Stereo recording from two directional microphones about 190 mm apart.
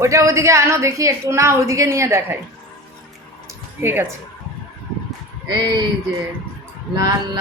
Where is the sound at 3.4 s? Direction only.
10° right (ahead or behind).